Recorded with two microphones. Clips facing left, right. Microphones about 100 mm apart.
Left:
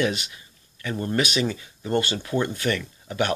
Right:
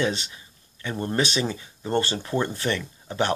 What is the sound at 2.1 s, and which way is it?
Speech, 10° right (ahead or behind).